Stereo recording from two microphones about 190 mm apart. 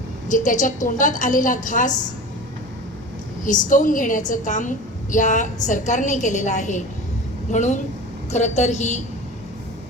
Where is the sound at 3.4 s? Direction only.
45° left (ahead or behind).